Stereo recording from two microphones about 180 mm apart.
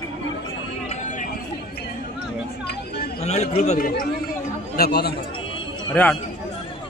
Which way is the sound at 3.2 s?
35° left (ahead or behind).